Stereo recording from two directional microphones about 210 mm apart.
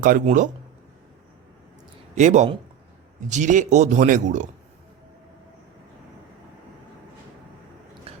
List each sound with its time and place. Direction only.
0.0 s speech: 40° right (ahead or behind)
2.1 s speech: 35° right (ahead or behind)
8.1 s biting: 30° right (ahead or behind)